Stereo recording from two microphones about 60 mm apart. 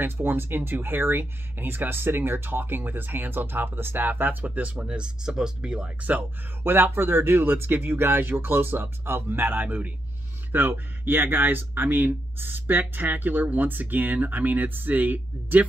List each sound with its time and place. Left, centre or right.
0.0 s speech: right; by 6.1 s centre
6.6 s speech: right